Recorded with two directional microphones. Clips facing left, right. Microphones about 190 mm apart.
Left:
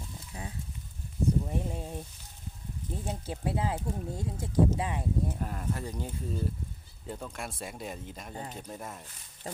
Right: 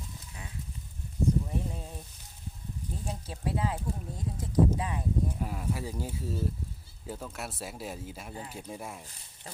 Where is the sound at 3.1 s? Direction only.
25° left (ahead or behind).